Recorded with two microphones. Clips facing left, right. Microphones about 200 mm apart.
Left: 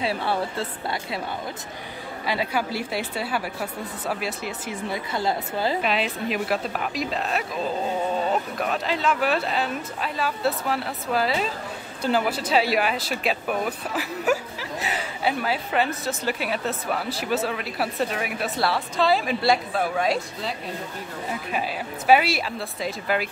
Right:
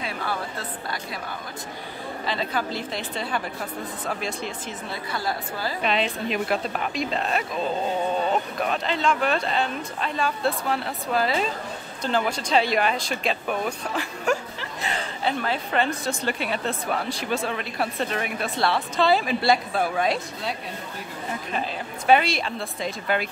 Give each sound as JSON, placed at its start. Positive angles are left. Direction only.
{"t": 0.0, "sound": "speech", "side_deg": 30}
{"t": 2.2, "sound": "a woman's voice", "side_deg": 10}
{"t": 5.1, "sound": "speech", "side_deg": 20}
{"t": 5.8, "sound": "speech", "side_deg": 5}